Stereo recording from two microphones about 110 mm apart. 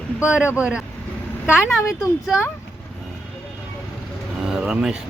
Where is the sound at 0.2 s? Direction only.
10° right (ahead or behind).